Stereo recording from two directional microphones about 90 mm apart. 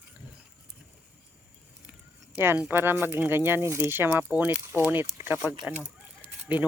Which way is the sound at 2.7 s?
25° right (ahead or behind).